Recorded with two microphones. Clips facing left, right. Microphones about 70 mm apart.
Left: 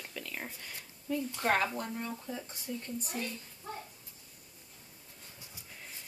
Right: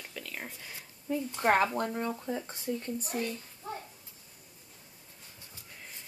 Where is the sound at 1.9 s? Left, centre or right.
Right.